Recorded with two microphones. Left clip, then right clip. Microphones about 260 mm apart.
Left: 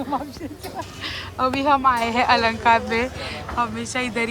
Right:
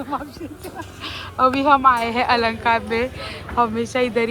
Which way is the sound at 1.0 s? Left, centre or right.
Centre.